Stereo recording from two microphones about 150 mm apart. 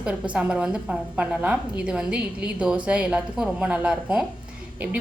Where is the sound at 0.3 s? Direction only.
5° right (ahead or behind).